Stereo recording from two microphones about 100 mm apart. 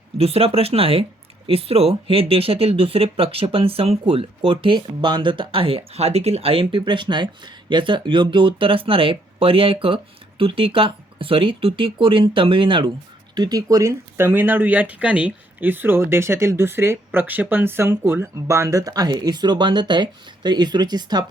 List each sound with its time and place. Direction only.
0.2 s speech: 85° right
4.5 s speech: 55° right (ahead or behind)
13.3 s speech: 40° right (ahead or behind)
14.2 s speech: 20° right (ahead or behind); by 21.2 s 45° right (ahead or behind)